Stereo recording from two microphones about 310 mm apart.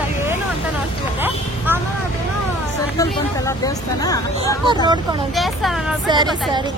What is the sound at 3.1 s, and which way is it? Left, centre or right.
Speech, centre.